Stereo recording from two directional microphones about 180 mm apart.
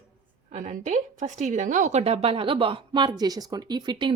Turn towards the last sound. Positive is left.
turn(degrees=-25)  # may be behind; listen again after turning